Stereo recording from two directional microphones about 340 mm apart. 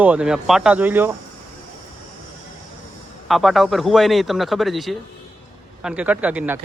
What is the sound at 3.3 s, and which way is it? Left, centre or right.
A man's voice, centre.